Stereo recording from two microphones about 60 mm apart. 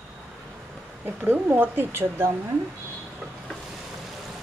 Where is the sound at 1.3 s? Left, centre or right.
Right.